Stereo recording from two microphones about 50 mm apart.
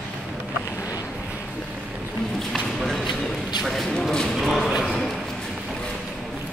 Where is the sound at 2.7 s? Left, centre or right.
Centre.